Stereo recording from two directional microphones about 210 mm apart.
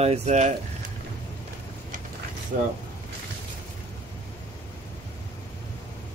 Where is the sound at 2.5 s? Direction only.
45° right (ahead or behind).